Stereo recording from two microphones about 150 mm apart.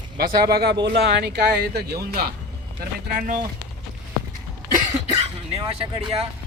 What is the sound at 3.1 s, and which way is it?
Speech, 60° right (ahead or behind).